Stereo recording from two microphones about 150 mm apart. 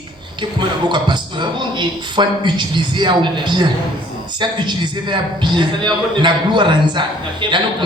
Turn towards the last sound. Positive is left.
turn(degrees=-30)  # may be behind; listen again after turning